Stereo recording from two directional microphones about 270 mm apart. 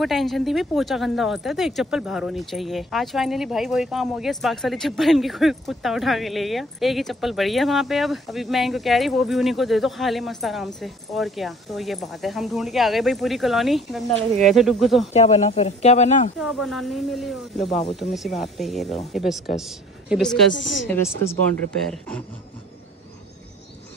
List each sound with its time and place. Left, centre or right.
0.0 s speech: centre
15.1 s speech: left
16.3 s a woman's voice: centre
20.5 s a woman's voice: left
20.9 s speech: centre